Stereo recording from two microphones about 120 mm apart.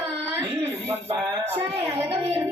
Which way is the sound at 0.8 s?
30° right (ahead or behind).